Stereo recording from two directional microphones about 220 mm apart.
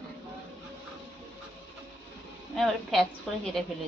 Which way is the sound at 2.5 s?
Centre (ahead or behind).